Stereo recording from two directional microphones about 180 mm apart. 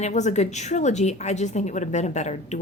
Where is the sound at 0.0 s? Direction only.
40° left (ahead or behind).